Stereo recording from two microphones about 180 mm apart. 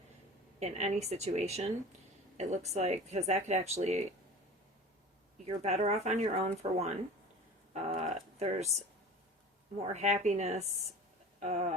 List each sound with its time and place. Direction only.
0.6 s speech: 40° right (ahead or behind)
5.5 s speech: 40° right (ahead or behind)
7.7 s a sound: 40° right (ahead or behind)
9.8 s speech: 40° right (ahead or behind)